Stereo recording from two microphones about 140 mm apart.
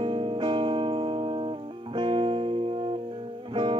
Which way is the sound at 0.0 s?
40° right (ahead or behind).